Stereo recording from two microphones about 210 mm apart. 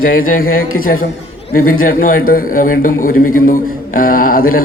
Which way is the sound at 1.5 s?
45° left (ahead or behind).